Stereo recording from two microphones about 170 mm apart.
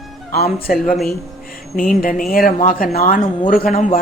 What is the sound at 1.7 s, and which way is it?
Speech, 55° left (ahead or behind).